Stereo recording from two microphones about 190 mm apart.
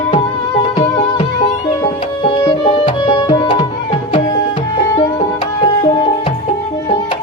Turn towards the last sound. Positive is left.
turn(degrees=25)  # may be behind; listen again after turning